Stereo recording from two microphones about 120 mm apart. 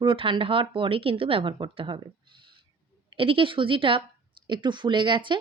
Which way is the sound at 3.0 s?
50° right (ahead or behind).